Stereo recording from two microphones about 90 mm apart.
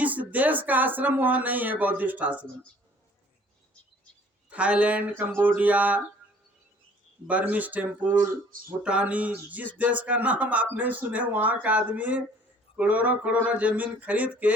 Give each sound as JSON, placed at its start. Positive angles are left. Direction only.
{"t": 0.0, "sound": "speech", "side_deg": -15}
{"t": 4.4, "sound": "speech", "side_deg": -15}
{"t": 7.3, "sound": "speech", "side_deg": -15}